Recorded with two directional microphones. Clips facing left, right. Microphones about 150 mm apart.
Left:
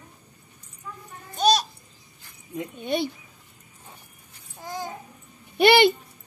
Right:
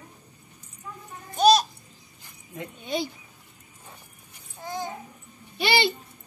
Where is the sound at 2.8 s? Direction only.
60° left (ahead or behind).